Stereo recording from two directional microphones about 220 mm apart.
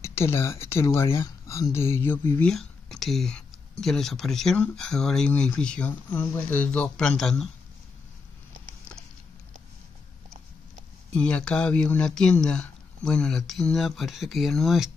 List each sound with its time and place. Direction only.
0.0 s speech: 10° left (ahead or behind)
11.1 s speech: 5° left (ahead or behind)